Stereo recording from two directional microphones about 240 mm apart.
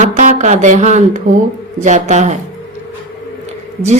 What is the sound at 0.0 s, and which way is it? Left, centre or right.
A woman's voice, right.